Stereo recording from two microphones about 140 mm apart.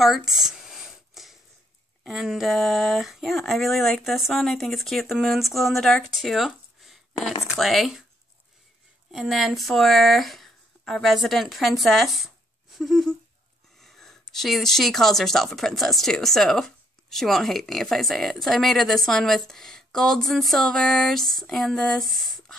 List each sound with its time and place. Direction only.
0.0 s a sound: centre (ahead or behind)
2.0 s speech: centre (ahead or behind)
9.1 s speech: centre (ahead or behind)